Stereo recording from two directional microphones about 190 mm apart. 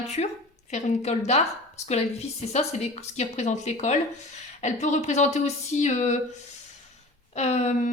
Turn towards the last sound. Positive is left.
turn(degrees=35)  # may be behind; listen again after turning